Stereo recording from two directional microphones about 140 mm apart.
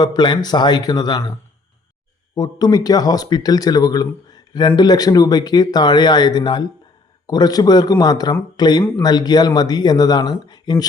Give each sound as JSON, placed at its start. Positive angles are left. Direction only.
{"t": 0.0, "sound": "speech", "side_deg": 30}
{"t": 2.3, "sound": "speech", "side_deg": 30}